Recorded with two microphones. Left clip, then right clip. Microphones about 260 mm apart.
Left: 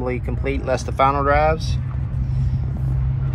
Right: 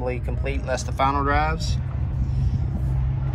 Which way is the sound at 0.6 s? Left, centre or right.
Centre.